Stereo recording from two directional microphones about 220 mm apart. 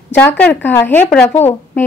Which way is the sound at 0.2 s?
10° left (ahead or behind).